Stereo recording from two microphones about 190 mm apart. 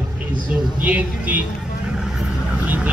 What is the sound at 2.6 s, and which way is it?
Vehicle, 10° right (ahead or behind).